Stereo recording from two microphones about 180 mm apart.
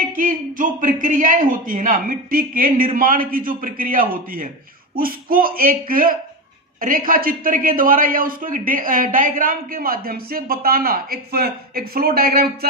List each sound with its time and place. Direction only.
0.1 s a man's voice: 50° right (ahead or behind)